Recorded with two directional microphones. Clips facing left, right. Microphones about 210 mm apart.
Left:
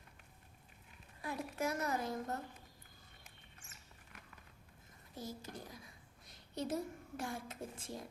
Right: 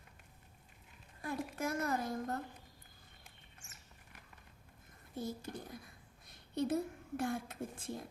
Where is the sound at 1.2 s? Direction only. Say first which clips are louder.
Right 1 dB; 50° right (ahead or behind).